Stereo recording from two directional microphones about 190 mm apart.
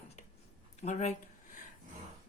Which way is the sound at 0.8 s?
35° left (ahead or behind).